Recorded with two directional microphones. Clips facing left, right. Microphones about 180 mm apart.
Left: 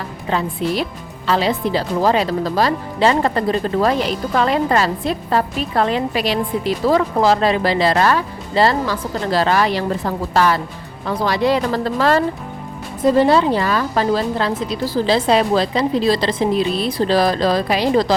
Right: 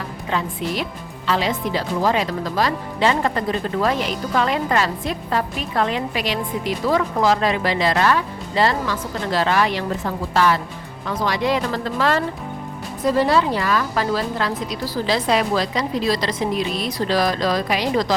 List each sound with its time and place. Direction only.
0.3 s speech: 35° left (ahead or behind)
13.0 s a woman's voice: 25° left (ahead or behind)